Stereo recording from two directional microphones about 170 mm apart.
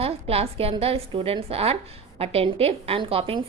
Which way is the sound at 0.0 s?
35° right (ahead or behind).